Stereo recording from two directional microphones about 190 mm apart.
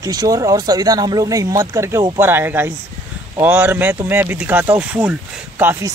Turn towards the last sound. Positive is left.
turn(degrees=-10)  # may be behind; listen again after turning